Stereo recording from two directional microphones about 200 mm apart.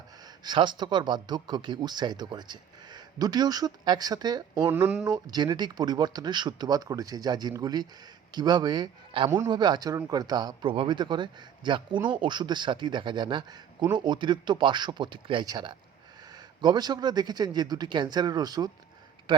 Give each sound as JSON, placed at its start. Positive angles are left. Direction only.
{"t": 0.4, "sound": "speech", "side_deg": -25}
{"t": 4.7, "sound": "speech", "side_deg": -5}
{"t": 5.0, "sound": "speech", "side_deg": -20}